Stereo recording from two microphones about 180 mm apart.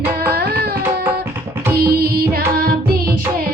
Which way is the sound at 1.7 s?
60° right (ahead or behind).